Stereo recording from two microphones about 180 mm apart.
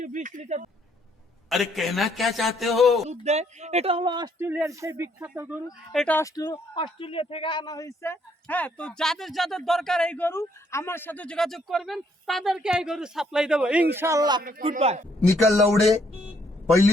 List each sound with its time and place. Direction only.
0.0 s speech: 45° right (ahead or behind)
1.5 s speech: centre (ahead or behind)
3.1 s speech: 40° right (ahead or behind)
4.4 s speech: 10° right (ahead or behind)
5.9 s speech: centre (ahead or behind)
6.1 s speech: 20° left (ahead or behind); by 13.8 s 5° right (ahead or behind)
13.9 s a man's voice: 15° right (ahead or behind)
14.7 s speech: 35° right (ahead or behind)
15.3 s speech: centre (ahead or behind)